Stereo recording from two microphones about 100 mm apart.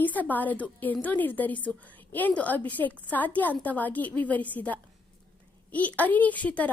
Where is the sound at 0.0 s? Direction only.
15° left (ahead or behind).